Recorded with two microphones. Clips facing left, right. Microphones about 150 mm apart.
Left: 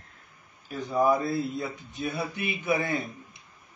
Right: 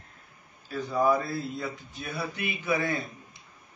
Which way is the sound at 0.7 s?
20° left (ahead or behind).